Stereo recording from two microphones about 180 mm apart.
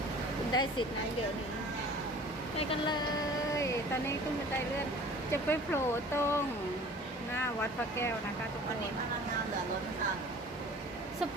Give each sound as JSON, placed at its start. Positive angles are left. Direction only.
{"t": 0.5, "sound": "speech", "side_deg": 25}
{"t": 2.6, "sound": "speech", "side_deg": 25}
{"t": 5.3, "sound": "speech", "side_deg": 15}